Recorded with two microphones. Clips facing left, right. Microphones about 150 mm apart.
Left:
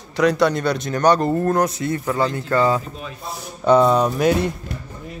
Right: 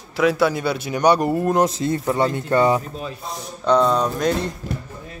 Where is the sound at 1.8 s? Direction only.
25° right (ahead or behind).